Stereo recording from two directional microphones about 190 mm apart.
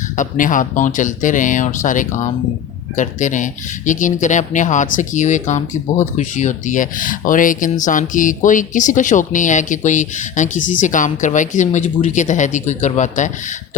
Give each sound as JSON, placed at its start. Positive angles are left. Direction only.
{"t": 0.2, "sound": "speech", "side_deg": 45}